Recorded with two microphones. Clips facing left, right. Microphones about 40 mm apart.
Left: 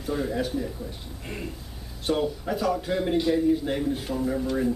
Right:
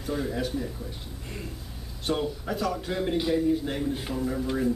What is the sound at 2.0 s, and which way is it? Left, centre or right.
A man's voice, centre.